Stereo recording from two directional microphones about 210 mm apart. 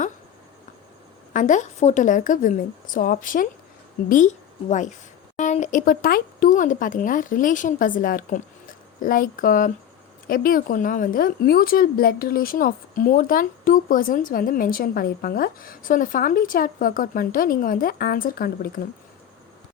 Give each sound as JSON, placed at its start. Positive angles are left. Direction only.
{"t": 1.3, "sound": "a woman's voice", "side_deg": 35}